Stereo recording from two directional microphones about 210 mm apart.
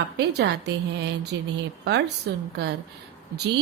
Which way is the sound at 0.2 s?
55° right (ahead or behind).